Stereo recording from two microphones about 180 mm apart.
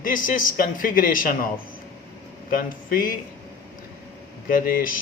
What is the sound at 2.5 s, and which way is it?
Speech, 50° left (ahead or behind).